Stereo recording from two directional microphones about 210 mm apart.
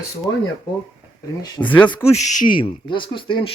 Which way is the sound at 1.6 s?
5° left (ahead or behind).